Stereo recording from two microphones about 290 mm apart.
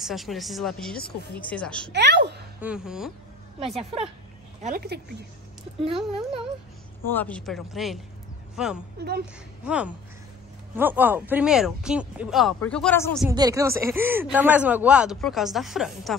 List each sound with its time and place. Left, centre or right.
0.0 s speech: centre
1.9 s a woman's voice: right
2.6 s speech: centre
3.5 s a woman's voice: centre
4.6 s speech: right
5.8 s speech: centre
7.1 s speech: centre
13.3 s speech: centre